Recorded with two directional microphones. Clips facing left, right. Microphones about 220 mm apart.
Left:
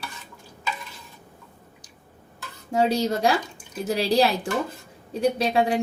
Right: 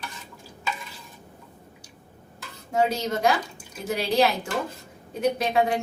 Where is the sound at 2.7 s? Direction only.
35° left (ahead or behind).